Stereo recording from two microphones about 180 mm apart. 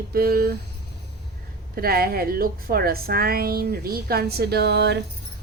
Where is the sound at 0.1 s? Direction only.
55° right (ahead or behind).